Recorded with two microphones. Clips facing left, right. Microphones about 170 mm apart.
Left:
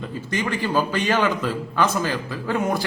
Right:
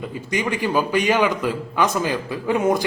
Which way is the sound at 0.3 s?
10° right (ahead or behind).